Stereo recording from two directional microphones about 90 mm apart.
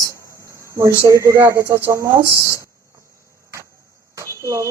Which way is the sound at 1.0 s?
35° right (ahead or behind).